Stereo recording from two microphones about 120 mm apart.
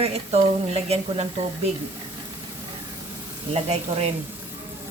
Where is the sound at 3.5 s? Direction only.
60° right (ahead or behind).